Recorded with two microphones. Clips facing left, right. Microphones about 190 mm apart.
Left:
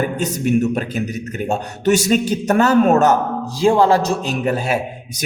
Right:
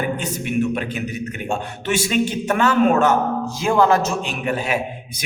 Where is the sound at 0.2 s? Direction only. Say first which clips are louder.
Left 5 dB; 40° left (ahead or behind).